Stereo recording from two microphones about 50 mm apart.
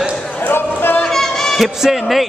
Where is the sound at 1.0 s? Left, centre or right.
Centre.